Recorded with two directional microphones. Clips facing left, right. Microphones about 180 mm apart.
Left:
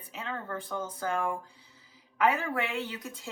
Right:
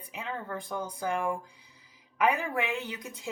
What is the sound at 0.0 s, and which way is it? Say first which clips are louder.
A woman's voice: right 1 dB; 15° right (ahead or behind).